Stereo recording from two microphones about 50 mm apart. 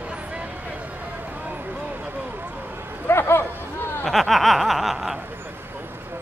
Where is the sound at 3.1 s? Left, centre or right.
Left.